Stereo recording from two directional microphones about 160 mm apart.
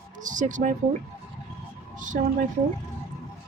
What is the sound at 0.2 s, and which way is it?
Speech, 50° right (ahead or behind).